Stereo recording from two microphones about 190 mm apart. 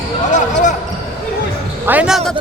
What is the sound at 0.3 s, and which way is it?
Basketball bounce, 40° left (ahead or behind).